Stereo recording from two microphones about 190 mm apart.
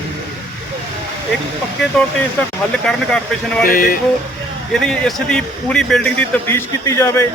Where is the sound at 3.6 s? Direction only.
50° left (ahead or behind).